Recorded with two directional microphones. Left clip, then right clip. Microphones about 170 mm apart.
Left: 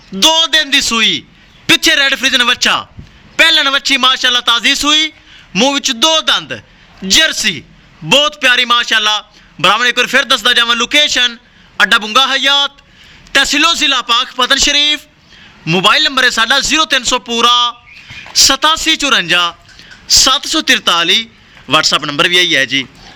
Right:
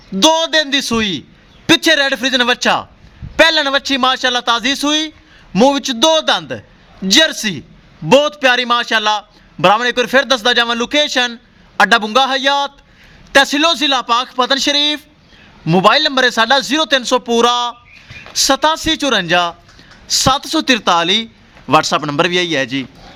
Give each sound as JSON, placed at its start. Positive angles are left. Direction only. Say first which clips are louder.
{"t": 0.1, "sound": "a man's voice", "louder": "left 2 dB", "side_deg": -40}